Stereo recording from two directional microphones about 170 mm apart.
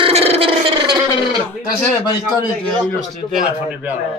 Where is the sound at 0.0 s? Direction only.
35° right (ahead or behind).